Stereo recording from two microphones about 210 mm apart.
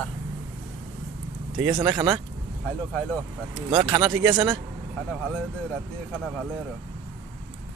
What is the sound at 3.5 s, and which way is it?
Speech, 20° right (ahead or behind).